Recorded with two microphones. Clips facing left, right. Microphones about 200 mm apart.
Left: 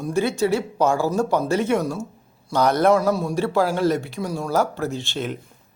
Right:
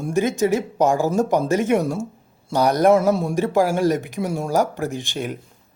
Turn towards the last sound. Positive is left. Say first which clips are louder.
# even
turn(degrees=-15)  # may be behind; listen again after turning